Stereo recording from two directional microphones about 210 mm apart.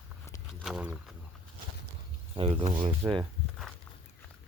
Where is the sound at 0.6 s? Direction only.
5° right (ahead or behind).